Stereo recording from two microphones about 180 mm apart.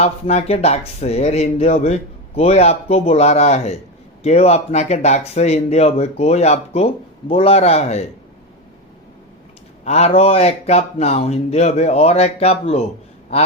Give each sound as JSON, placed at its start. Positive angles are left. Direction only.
{"t": 0.0, "sound": "speech", "side_deg": 35}
{"t": 9.8, "sound": "speech", "side_deg": 40}